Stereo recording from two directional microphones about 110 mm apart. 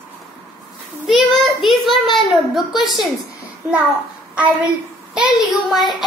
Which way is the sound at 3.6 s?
15° right (ahead or behind).